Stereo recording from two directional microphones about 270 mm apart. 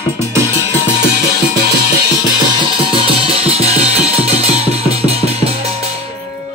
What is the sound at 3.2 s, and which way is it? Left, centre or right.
Music, right.